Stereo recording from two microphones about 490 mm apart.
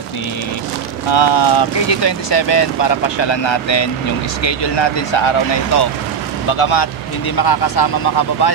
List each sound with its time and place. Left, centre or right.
1.1 s speech: left
7.3 s speech: left